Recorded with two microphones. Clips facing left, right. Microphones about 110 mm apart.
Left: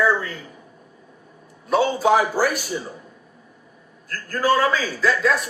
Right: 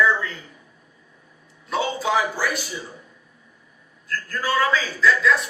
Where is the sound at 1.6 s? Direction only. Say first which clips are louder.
Left 6 dB; 45° left (ahead or behind).